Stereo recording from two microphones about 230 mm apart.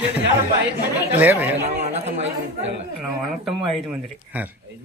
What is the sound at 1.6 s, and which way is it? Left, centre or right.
Chatter, right.